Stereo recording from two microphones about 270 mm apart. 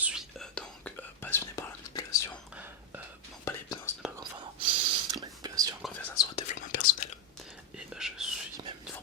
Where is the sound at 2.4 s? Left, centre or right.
Centre.